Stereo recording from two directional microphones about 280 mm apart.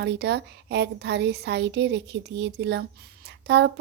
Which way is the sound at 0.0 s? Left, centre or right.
Right.